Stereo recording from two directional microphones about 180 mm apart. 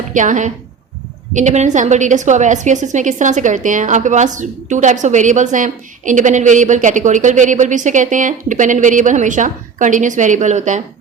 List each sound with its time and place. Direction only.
0.1 s a woman's voice: 45° right (ahead or behind)